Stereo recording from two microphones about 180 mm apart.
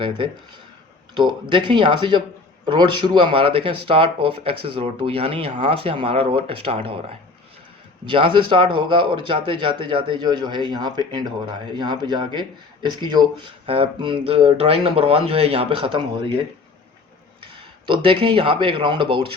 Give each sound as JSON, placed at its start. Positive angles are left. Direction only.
{"t": 0.0, "sound": "speech", "side_deg": -25}
{"t": 8.0, "sound": "speech", "side_deg": -25}
{"t": 17.8, "sound": "speech", "side_deg": -30}